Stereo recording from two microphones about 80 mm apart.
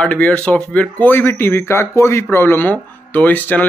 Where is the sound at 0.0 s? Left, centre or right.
Centre.